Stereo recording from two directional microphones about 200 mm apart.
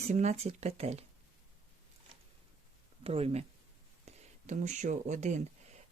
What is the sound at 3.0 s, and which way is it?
Speech, 30° right (ahead or behind).